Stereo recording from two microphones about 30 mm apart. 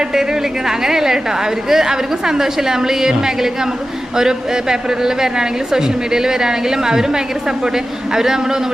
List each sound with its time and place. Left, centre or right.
0.9 s a woman's voice: centre